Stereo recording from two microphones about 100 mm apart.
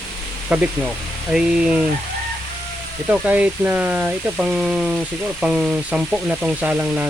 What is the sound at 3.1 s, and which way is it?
Speech, 10° right (ahead or behind).